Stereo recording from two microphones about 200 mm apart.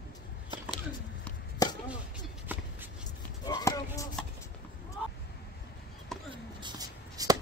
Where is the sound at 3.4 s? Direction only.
20° left (ahead or behind).